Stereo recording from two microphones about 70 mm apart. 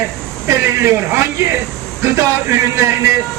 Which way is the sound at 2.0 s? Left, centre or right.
Right.